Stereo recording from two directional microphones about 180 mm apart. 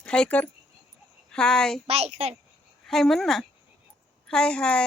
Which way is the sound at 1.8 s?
35° right (ahead or behind).